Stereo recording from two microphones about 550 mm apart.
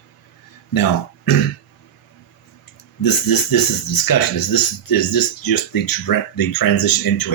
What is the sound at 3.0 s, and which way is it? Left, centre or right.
Speech, left.